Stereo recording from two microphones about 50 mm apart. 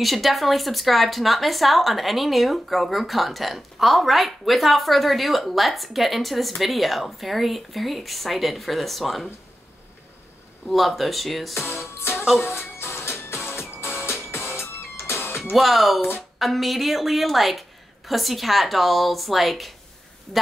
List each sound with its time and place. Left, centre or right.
0.0 s speech: centre
10.7 s speech: centre
11.5 s music: left
12.3 s speech: centre
12.5 s music: left
15.5 s speech: centre